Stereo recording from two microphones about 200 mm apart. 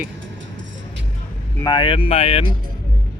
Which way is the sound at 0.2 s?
70° right (ahead or behind).